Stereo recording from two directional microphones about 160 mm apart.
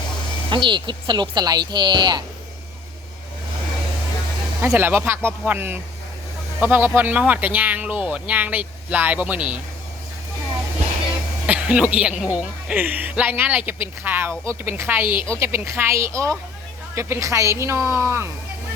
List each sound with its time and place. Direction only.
0.5 s speech: 30° right (ahead or behind)
4.6 s speech: 10° right (ahead or behind)
11.4 s speech: 10° right (ahead or behind)